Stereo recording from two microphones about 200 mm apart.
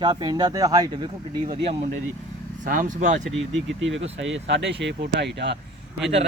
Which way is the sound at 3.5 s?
70° right (ahead or behind).